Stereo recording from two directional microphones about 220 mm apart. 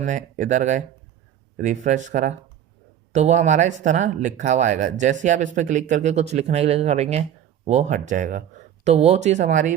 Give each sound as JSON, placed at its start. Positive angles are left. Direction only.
{"t": 0.0, "sound": "speech", "side_deg": -35}